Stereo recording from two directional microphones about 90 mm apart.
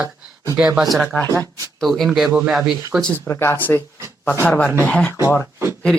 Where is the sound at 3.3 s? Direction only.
25° left (ahead or behind).